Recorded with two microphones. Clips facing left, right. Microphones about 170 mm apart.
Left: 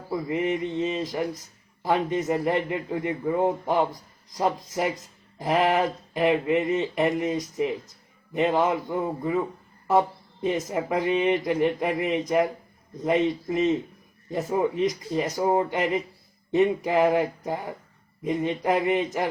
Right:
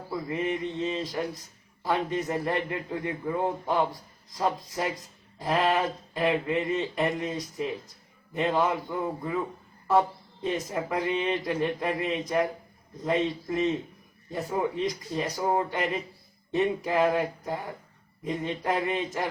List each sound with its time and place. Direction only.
0.3 s speech: 20° left (ahead or behind)
10.4 s speech: 20° left (ahead or behind)